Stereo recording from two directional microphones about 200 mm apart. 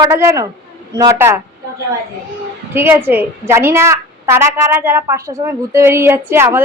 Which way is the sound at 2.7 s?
10° right (ahead or behind).